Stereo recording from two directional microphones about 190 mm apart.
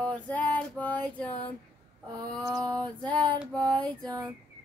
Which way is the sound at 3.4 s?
5° left (ahead or behind).